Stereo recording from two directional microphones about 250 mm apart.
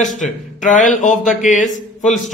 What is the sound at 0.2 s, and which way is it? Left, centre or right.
Speech, left.